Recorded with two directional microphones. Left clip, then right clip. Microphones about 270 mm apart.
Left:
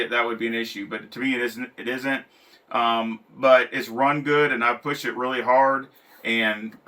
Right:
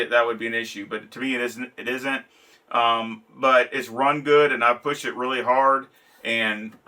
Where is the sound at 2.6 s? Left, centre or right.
Centre.